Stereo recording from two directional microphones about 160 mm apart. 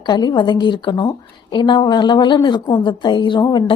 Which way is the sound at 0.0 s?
25° left (ahead or behind).